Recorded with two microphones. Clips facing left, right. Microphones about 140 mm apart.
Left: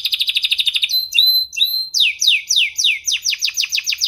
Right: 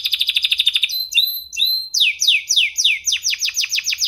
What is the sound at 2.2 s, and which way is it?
Chirp, 25° left (ahead or behind).